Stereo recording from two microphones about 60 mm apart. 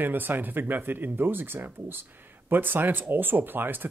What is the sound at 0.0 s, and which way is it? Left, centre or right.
Speech, right.